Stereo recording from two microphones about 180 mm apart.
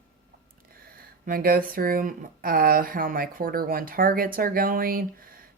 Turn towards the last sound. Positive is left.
turn(degrees=-55)  # may be behind; listen again after turning